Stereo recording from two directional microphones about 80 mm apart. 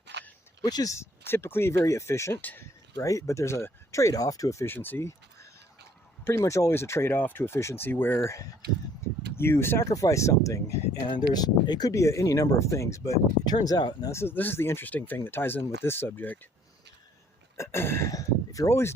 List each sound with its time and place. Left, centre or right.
0.6 s speech: left
0.9 s speech: left
2.4 s speech: left
2.9 s speech: left
4.6 s speech: left
9.0 s a sound: left
9.4 s speech: left
9.9 s speech: left
11.1 s speech: left
11.9 s speech: left
13.4 s speech: left
14.1 s speech: left
17.6 s speech: left
18.1 s a sound: left